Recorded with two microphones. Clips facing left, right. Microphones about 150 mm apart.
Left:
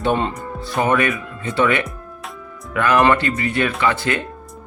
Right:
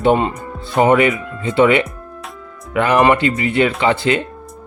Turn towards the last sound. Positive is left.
turn(degrees=-20)  # may be behind; listen again after turning